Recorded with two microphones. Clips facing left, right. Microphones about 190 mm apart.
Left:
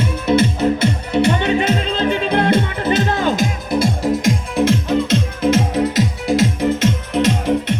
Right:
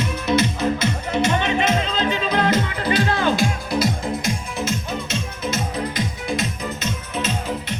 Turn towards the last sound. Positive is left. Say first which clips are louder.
# left 9 dB
turn(degrees=80)